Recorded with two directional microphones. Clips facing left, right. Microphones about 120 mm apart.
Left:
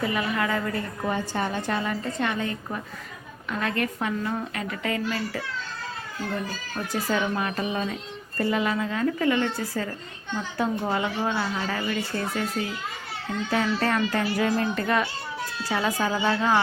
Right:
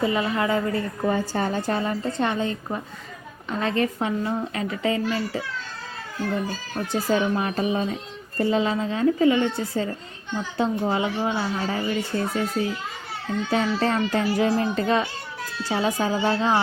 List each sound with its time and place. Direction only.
0.0 s speech: 25° right (ahead or behind)
1.2 s a woman's voice: 35° right (ahead or behind)
6.9 s speech: 25° right (ahead or behind)
13.5 s speech: 25° right (ahead or behind)